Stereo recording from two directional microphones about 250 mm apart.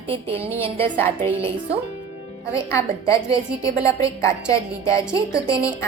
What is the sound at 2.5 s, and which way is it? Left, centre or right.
A woman's voice, centre.